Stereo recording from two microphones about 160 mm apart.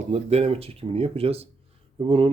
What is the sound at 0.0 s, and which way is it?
Speech, 40° right (ahead or behind).